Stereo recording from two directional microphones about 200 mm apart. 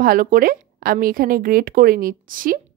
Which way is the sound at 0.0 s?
45° right (ahead or behind).